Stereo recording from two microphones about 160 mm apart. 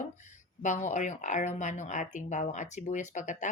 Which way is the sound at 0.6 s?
50° left (ahead or behind).